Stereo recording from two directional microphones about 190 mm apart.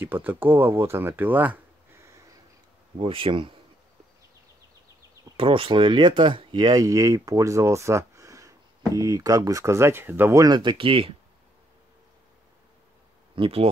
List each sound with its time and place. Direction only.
0.0 s speech: 10° right (ahead or behind)
3.0 s speech: 30° right (ahead or behind)
5.4 s speech: 30° right (ahead or behind)
13.4 s speech: 30° right (ahead or behind)